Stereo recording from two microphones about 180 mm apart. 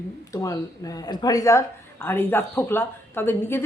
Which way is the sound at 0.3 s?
20° left (ahead or behind).